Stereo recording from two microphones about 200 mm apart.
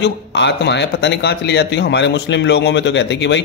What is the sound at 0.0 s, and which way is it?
Speech, 60° left (ahead or behind).